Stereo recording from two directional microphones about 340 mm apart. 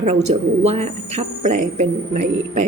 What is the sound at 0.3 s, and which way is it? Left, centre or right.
Speech, centre.